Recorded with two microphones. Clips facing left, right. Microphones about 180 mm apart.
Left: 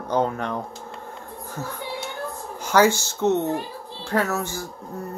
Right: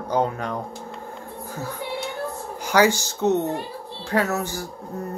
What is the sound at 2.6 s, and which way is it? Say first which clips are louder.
Speech: left 1 dB; 15° right (ahead or behind).